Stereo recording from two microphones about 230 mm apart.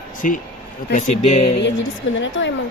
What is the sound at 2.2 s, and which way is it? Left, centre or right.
Speech, left.